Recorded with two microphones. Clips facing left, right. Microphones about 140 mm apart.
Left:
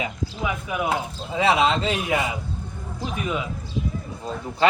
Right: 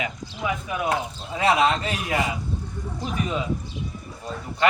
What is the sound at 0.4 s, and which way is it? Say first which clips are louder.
Speech: even; 5° left (ahead or behind).